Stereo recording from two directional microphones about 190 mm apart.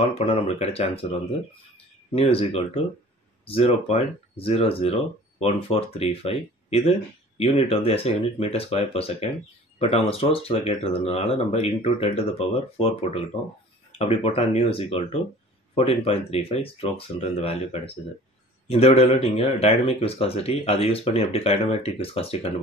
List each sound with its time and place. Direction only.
0.1 s speech: 30° left (ahead or behind)
2.1 s speech: 30° left (ahead or behind)